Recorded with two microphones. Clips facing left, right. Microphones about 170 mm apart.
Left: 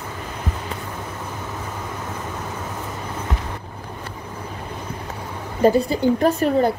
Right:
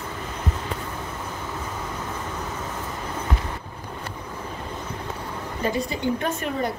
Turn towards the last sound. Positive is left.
turn(degrees=35)  # may be behind; listen again after turning